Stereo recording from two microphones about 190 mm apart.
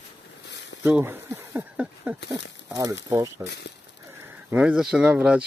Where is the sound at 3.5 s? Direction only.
60° left (ahead or behind).